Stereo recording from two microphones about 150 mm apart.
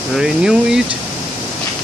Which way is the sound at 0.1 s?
5° right (ahead or behind).